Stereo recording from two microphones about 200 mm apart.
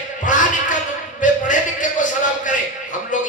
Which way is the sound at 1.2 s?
40° left (ahead or behind).